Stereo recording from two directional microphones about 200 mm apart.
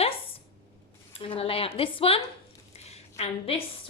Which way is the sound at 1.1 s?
25° left (ahead or behind).